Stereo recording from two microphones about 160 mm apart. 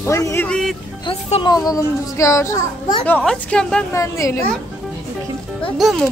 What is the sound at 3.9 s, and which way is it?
Speech, 20° left (ahead or behind).